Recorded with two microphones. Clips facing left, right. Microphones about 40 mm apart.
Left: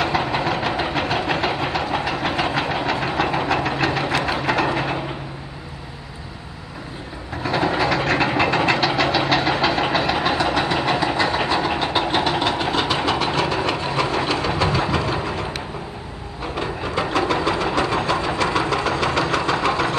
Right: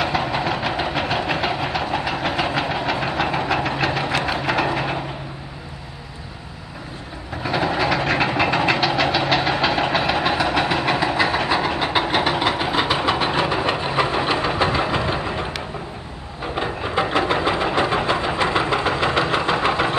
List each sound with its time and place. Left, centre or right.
0.0 s vehicle: centre
7.4 s train: centre
11.8 s vehicle: centre
13.7 s a sound: right
14.6 s engine: right
16.5 s a sound: right
17.7 s engine: right